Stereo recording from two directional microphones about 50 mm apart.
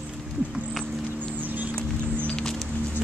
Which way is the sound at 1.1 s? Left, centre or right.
Right.